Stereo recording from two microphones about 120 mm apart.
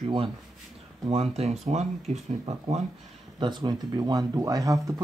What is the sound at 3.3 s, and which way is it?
Speech, 40° right (ahead or behind).